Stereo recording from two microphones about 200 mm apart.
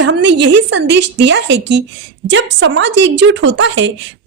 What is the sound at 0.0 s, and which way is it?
Speech, 65° right (ahead or behind).